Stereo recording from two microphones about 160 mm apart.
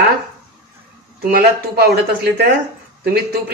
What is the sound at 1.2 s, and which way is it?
A woman's voice, 65° right (ahead or behind).